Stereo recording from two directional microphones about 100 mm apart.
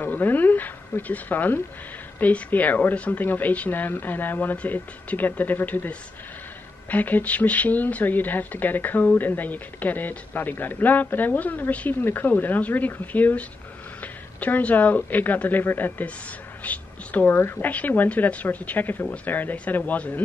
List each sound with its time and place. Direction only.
0.0 s speech: 20° left (ahead or behind)